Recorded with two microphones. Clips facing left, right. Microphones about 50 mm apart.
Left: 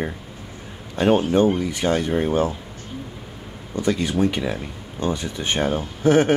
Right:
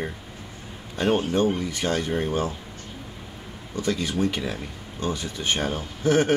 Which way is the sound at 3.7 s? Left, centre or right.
Left.